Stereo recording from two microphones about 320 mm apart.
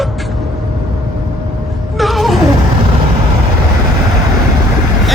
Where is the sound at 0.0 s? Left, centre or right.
Centre.